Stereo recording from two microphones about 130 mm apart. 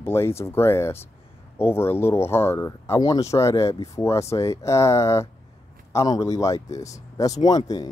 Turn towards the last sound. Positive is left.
turn(degrees=30)  # may be behind; listen again after turning